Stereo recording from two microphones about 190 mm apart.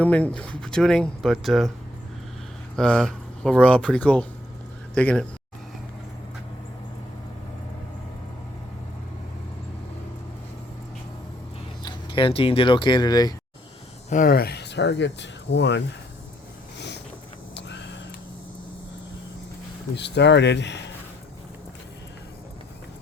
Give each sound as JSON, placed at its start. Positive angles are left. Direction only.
{"t": 0.0, "sound": "speech", "side_deg": 5}
{"t": 2.7, "sound": "speech", "side_deg": 5}
{"t": 11.8, "sound": "speech", "side_deg": 25}
{"t": 14.1, "sound": "speech", "side_deg": 45}
{"t": 16.7, "sound": "a sound", "side_deg": 65}
{"t": 17.5, "sound": "vehicle", "side_deg": 65}
{"t": 20.0, "sound": "speech", "side_deg": 65}